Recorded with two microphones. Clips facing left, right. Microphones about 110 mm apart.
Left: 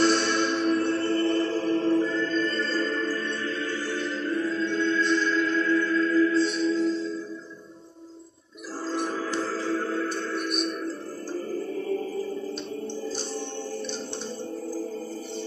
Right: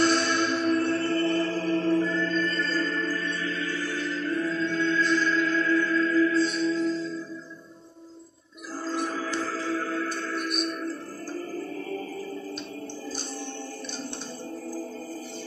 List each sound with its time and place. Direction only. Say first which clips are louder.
0.0 s music: left 1 dB; 25° left (ahead or behind)
8.8 s music: left 1 dB; 25° left (ahead or behind)